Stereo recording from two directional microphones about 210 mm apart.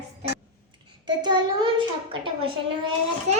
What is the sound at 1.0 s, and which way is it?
Child singing, 20° right (ahead or behind).